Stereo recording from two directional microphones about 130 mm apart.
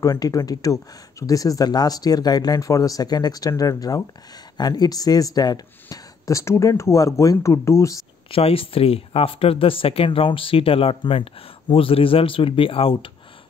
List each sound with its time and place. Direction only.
0.0 s speech: 25° left (ahead or behind)
8.3 s speech: 45° left (ahead or behind)